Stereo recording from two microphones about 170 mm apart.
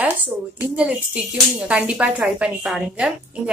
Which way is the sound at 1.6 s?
5° right (ahead or behind).